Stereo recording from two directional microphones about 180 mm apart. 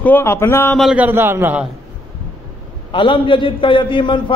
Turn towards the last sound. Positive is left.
turn(degrees=25)  # may be behind; listen again after turning